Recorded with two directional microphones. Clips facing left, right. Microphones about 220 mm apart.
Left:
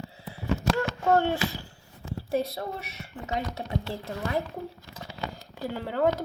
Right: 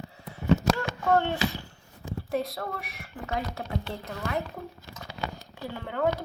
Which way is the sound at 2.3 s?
25° left (ahead or behind).